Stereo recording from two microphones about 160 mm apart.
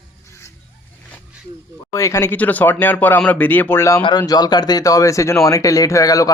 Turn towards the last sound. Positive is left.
turn(degrees=20)  # may be behind; listen again after turning